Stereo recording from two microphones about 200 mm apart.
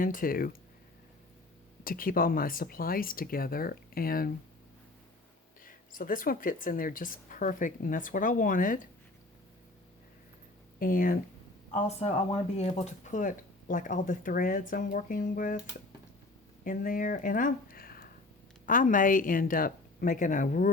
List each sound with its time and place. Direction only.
0.0 s speech: 45° left (ahead or behind)
1.8 s speech: 45° left (ahead or behind)
5.6 s speech: 45° left (ahead or behind)
10.8 s speech: 45° left (ahead or behind)
11.7 s speech: 30° left (ahead or behind)
16.6 s speech: 40° left (ahead or behind)